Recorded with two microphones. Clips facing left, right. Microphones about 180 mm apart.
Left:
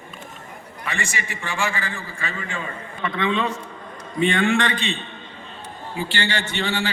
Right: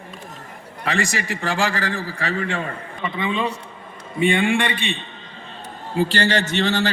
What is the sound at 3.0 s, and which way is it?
A man's voice, 10° right (ahead or behind).